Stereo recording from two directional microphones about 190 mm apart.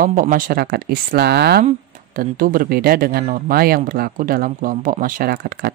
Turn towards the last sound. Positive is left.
turn(degrees=-55)  # may be behind; listen again after turning